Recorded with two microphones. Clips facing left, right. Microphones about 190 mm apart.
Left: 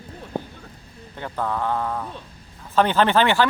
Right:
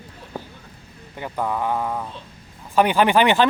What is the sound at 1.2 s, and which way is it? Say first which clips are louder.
Speech: right 1 dB; 10° right (ahead or behind).